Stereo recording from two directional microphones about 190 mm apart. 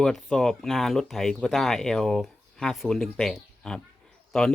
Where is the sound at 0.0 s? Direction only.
Centre (ahead or behind).